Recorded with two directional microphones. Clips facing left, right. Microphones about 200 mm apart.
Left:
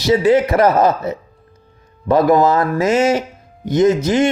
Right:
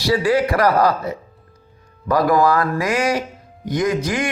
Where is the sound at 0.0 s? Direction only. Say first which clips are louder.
Left 4 dB; 20° left (ahead or behind).